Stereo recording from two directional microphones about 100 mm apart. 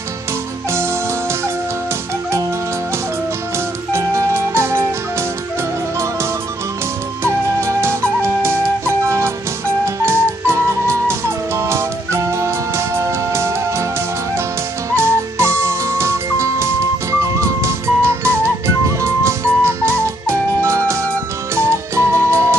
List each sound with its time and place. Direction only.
3.9 s music: 30° right (ahead or behind)
7.2 s flute: 25° right (ahead or behind)
10.0 s music: 25° right (ahead or behind)
15.0 s music: 25° right (ahead or behind)